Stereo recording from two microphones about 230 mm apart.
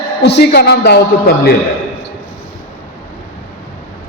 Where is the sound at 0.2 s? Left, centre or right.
Left.